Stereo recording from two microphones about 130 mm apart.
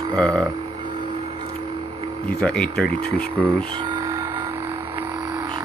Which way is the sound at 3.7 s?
35° right (ahead or behind).